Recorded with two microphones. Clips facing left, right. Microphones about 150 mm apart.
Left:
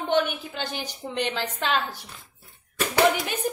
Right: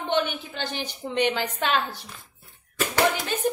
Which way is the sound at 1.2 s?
Centre (ahead or behind).